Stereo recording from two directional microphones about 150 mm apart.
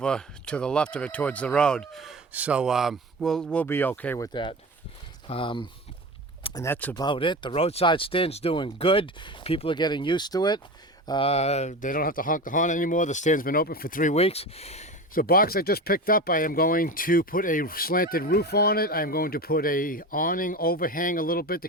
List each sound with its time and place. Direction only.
0.0 s speech: 5° left (ahead or behind)
4.3 s speech: 30° left (ahead or behind)
6.5 s speech: 20° left (ahead or behind)
6.9 s speech: 30° left (ahead or behind)
11.3 s speech: 45° left (ahead or behind); by 14.2 s 60° left (ahead or behind)
14.2 s speech: 40° left (ahead or behind)
15.1 s speech: 70° left (ahead or behind)